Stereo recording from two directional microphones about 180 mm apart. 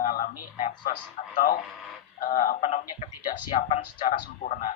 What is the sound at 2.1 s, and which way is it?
A man's voice, 50° left (ahead or behind).